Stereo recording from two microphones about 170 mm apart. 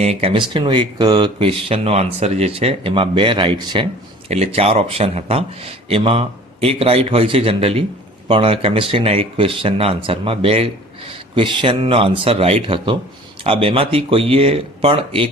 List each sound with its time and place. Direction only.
0.0 s speech: 35° right (ahead or behind)